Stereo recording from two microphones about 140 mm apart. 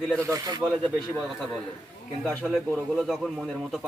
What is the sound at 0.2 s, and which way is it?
Speech, 25° right (ahead or behind).